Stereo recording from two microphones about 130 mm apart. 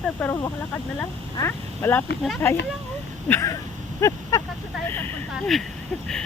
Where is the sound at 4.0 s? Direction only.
25° left (ahead or behind).